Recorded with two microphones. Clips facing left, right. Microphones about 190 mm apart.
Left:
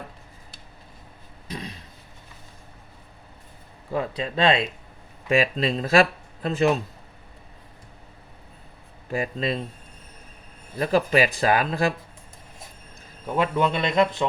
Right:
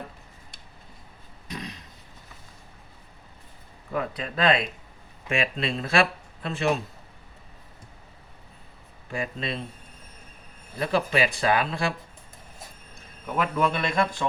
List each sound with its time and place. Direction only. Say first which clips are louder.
1.5 s a sound: left 2 dB; 30° left (ahead or behind)
3.9 s a man's voice: left 3 dB; 30° left (ahead or behind)
9.1 s speech: left 5 dB; 35° left (ahead or behind)
10.8 s speech: left 4 dB; 40° left (ahead or behind)
13.3 s a man's voice: left 2 dB; 25° left (ahead or behind)